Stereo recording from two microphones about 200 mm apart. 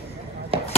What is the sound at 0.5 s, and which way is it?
Chop, 30° right (ahead or behind).